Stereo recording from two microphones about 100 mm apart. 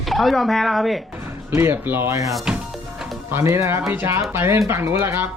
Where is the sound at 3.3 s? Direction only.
30° right (ahead or behind).